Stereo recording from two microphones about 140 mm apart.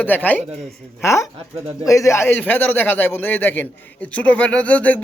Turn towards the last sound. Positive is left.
turn(degrees=10)  # may be behind; listen again after turning